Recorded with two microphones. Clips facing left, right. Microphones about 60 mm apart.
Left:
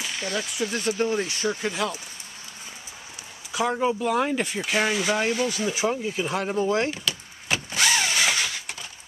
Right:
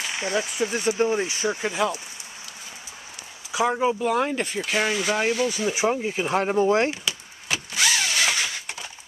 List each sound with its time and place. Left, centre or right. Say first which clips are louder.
0.0 s speech: right 3 dB; right
3.5 s speech: right 2 dB; centre
5.7 s speech: right 2 dB; right
7.7 s drill: even; centre